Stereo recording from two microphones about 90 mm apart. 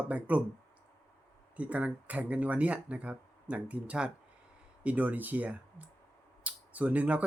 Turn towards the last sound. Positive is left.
turn(degrees=-15)  # may be behind; listen again after turning